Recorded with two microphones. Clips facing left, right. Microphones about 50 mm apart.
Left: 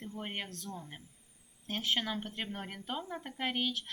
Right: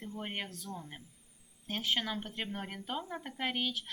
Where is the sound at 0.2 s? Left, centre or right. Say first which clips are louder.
Even; centre.